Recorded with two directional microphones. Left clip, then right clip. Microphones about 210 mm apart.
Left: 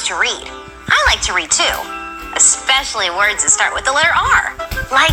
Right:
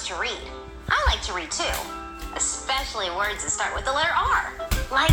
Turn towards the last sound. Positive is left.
turn(degrees=50)  # may be behind; listen again after turning